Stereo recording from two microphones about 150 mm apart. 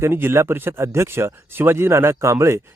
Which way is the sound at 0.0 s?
15° right (ahead or behind).